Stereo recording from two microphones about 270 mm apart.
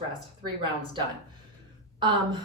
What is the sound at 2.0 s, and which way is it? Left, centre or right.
Speech, centre.